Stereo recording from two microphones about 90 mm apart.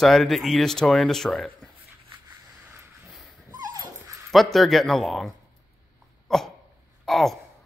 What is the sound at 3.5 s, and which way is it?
Dog, 45° right (ahead or behind).